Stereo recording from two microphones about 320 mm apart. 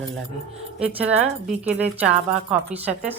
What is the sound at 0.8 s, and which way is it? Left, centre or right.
Speech, centre.